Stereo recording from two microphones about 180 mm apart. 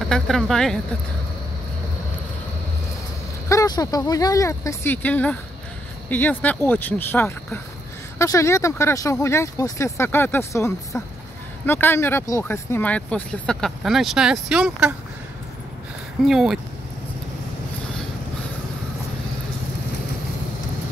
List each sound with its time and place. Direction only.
0.0 s speech: centre (ahead or behind)
3.4 s speech: 20° left (ahead or behind); by 15.0 s 5° right (ahead or behind)
16.3 s speech: 5° right (ahead or behind)